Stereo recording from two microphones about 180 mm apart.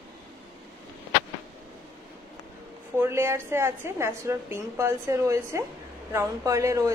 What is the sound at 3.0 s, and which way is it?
A woman's voice, 15° right (ahead or behind).